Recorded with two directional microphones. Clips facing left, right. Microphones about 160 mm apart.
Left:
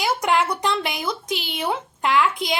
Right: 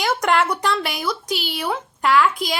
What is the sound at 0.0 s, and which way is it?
Speech, 10° left (ahead or behind).